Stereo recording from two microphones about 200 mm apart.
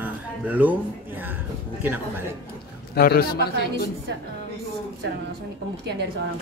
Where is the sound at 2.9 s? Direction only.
50° left (ahead or behind).